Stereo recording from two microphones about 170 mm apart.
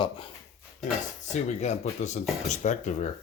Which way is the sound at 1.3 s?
40° left (ahead or behind).